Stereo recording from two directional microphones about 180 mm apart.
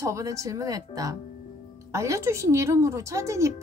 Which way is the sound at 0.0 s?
20° right (ahead or behind).